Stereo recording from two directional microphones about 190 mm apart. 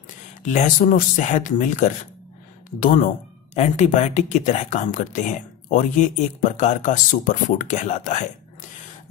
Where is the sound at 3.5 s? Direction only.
35° left (ahead or behind).